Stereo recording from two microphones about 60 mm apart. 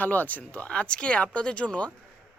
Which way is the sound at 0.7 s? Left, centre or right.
Centre.